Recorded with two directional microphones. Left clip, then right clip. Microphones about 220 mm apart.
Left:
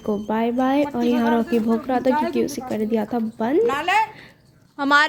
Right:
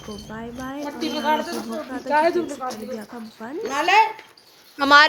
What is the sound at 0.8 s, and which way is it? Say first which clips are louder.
Speech: left 3 dB; 40° left (ahead or behind).